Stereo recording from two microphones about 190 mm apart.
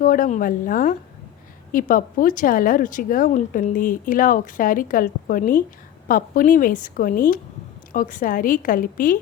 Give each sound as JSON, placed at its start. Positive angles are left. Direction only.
{"t": 0.0, "sound": "speech", "side_deg": 45}